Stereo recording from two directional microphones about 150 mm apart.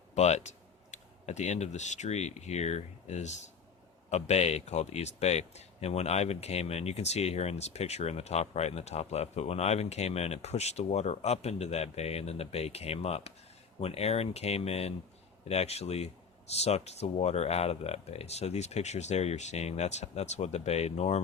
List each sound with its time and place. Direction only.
0.1 s speech: 50° left (ahead or behind)